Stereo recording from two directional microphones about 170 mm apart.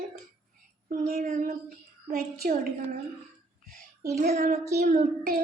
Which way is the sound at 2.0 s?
60° right (ahead or behind).